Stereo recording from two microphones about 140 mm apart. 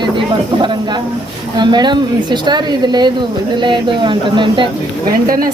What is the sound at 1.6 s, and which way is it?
A woman's voice, 30° right (ahead or behind).